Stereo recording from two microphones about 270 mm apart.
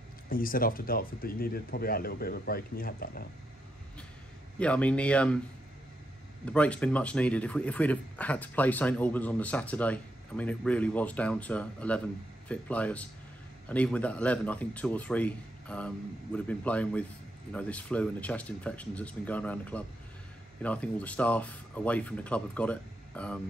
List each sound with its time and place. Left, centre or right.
0.3 s speech: left
4.6 s speech: centre
6.4 s speech: centre